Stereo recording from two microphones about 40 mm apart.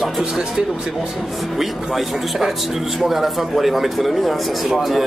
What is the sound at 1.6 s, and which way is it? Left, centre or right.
Speech, centre.